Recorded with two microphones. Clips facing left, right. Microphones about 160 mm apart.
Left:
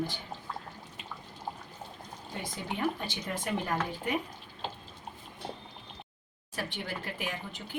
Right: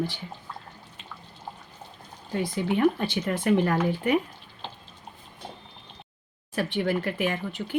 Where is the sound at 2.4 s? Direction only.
75° right (ahead or behind).